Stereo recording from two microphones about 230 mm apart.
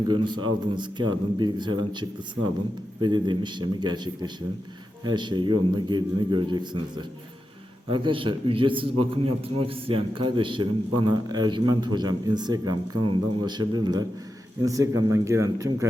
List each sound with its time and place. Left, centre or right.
0.1 s a man's voice: centre